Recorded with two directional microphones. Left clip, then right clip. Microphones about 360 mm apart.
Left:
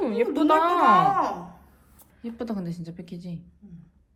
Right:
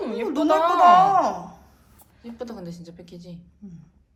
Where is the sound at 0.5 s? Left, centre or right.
Centre.